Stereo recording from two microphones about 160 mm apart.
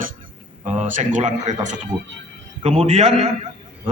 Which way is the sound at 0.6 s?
50° right (ahead or behind).